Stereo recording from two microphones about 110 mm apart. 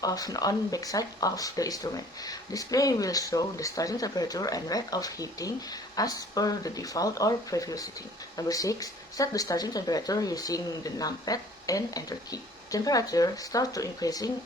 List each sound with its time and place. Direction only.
0.0 s speech: 35° left (ahead or behind)